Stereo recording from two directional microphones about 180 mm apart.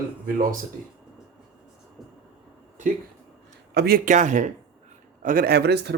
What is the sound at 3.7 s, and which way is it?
Speech, 60° right (ahead or behind).